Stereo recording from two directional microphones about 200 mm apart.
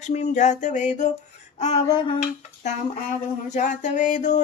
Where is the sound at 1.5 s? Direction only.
35° left (ahead or behind).